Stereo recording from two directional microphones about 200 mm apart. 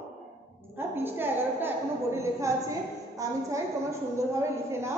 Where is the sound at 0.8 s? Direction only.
10° right (ahead or behind).